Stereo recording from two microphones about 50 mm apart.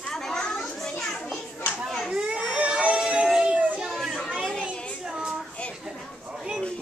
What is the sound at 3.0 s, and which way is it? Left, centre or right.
Music, centre.